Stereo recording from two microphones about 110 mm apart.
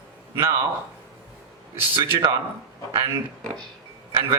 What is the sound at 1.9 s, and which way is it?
Speech, 45° right (ahead or behind).